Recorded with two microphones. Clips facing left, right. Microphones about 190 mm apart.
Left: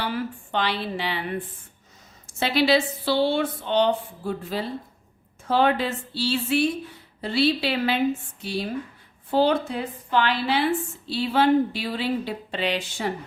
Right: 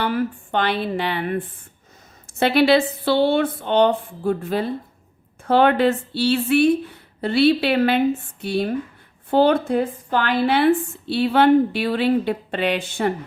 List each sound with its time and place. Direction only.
0.0 s a woman's voice: 55° right (ahead or behind)
2.2 s a woman's voice: 55° right (ahead or behind)